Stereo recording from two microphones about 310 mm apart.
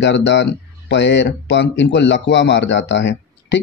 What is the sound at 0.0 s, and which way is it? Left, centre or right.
Speech, left.